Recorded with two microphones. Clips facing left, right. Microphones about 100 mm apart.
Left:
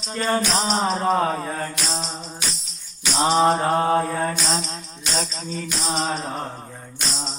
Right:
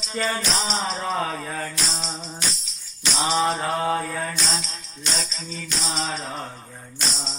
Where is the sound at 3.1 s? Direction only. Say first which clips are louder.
Left 5 dB; 45° left (ahead or behind).